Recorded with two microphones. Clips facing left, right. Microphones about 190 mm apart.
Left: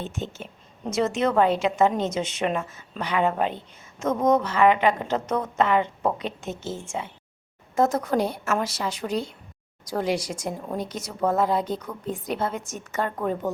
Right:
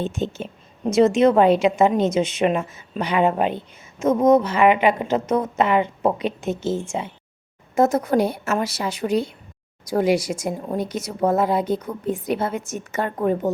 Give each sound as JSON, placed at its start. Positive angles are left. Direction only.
{"t": 0.0, "sound": "a woman's voice", "side_deg": -90}
{"t": 1.2, "sound": "a woman's voice", "side_deg": -15}
{"t": 4.0, "sound": "a woman's voice", "side_deg": -5}
{"t": 7.8, "sound": "a woman's voice", "side_deg": -5}